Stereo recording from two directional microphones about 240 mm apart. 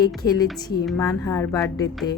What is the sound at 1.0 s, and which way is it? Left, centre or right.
Speech, centre.